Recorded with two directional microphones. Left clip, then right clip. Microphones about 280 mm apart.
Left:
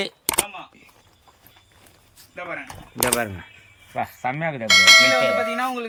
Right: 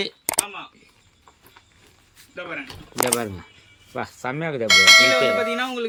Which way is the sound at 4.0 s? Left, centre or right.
Centre.